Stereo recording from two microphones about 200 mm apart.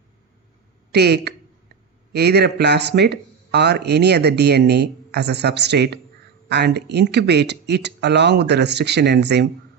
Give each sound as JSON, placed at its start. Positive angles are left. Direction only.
{"t": 0.9, "sound": "speech", "side_deg": -55}